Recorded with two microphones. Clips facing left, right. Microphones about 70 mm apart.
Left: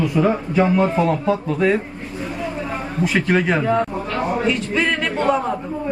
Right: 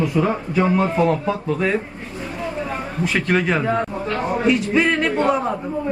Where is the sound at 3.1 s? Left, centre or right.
Centre.